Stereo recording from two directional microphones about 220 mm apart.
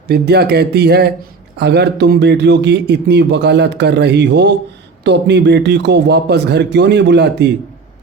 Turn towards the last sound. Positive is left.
turn(degrees=-50)  # may be behind; listen again after turning